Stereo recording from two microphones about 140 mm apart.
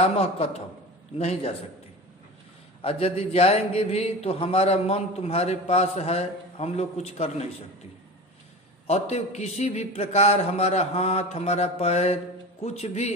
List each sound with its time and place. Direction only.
0.0 s a man's voice: 45° left (ahead or behind)
2.8 s a man's voice: 45° left (ahead or behind)
8.8 s a man's voice: 50° left (ahead or behind)